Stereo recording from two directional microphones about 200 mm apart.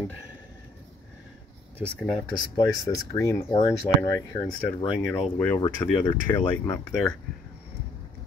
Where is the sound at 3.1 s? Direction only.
15° left (ahead or behind).